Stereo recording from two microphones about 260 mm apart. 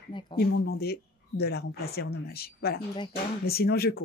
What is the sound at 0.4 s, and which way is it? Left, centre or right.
Speech, left.